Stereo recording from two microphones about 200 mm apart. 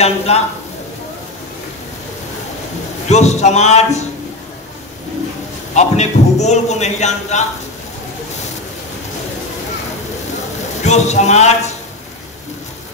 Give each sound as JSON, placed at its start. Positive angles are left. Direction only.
{"t": 0.3, "sound": "a man's voice", "side_deg": 30}
{"t": 3.1, "sound": "a man's voice", "side_deg": 35}
{"t": 5.8, "sound": "a man's voice", "side_deg": 35}
{"t": 10.8, "sound": "a man's voice", "side_deg": 35}